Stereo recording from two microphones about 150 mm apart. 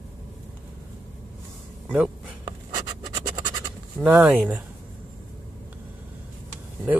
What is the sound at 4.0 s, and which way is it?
Speech, 10° right (ahead or behind).